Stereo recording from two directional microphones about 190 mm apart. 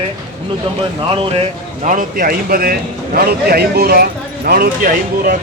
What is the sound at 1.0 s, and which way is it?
Speech, 25° right (ahead or behind).